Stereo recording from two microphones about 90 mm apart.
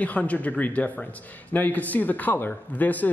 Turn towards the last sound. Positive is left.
turn(degrees=20)  # may be behind; listen again after turning